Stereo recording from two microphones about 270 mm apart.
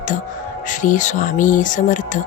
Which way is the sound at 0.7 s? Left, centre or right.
Left.